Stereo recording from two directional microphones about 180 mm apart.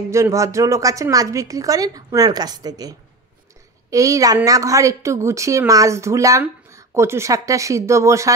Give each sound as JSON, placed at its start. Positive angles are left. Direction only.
{"t": 0.1, "sound": "a woman's voice", "side_deg": -15}